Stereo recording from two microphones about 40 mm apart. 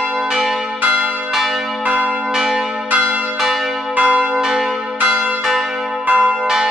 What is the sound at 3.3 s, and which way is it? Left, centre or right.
Change ringing, centre.